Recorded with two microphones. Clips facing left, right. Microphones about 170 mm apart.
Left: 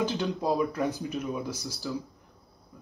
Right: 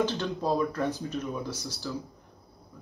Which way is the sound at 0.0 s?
10° left (ahead or behind).